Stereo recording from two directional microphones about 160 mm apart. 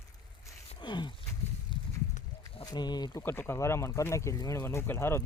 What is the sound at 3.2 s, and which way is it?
Speech, 15° left (ahead or behind).